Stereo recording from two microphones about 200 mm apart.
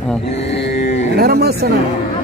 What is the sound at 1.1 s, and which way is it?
Speech, 50° right (ahead or behind).